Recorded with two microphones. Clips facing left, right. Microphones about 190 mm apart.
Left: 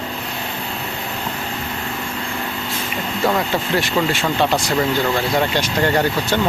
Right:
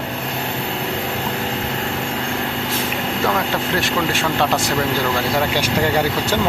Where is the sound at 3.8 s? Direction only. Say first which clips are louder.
Left 3 dB; centre (ahead or behind).